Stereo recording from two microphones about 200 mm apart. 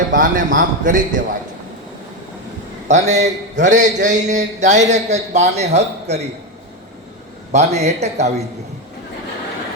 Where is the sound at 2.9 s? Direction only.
35° right (ahead or behind).